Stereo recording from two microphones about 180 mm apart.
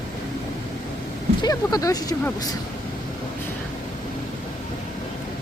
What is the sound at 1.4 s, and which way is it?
Speech, 20° left (ahead or behind).